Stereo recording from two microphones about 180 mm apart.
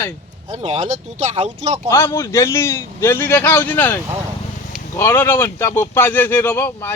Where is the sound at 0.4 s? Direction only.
35° right (ahead or behind).